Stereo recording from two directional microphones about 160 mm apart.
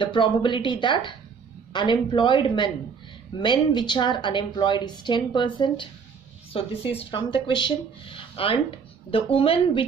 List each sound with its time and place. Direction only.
0.0 s a woman's voice: 30° left (ahead or behind)